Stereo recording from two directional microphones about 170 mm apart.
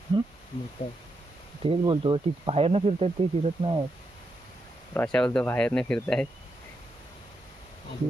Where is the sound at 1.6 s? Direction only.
30° right (ahead or behind).